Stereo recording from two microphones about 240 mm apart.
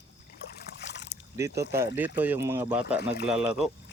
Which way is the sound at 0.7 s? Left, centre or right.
Left.